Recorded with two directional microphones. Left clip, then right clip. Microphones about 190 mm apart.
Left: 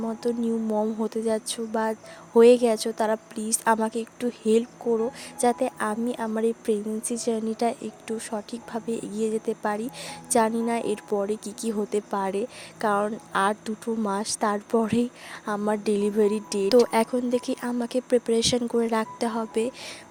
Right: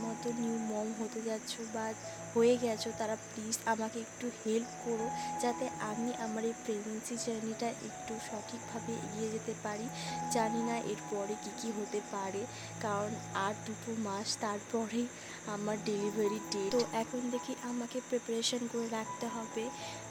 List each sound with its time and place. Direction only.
0.2 s speech: 45° left (ahead or behind)